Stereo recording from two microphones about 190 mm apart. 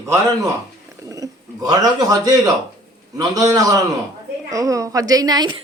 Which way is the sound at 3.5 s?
20° right (ahead or behind).